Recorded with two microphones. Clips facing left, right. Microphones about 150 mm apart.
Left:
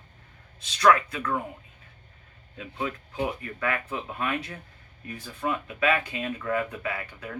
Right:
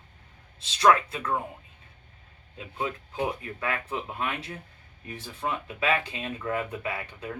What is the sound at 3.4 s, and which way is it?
Speech, 25° right (ahead or behind).